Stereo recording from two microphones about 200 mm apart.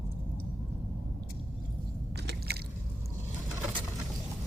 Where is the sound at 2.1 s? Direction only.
55° right (ahead or behind).